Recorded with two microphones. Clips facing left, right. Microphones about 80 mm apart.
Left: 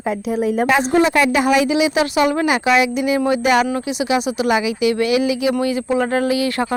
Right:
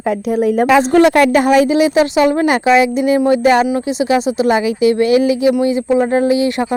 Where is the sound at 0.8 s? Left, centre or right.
Right.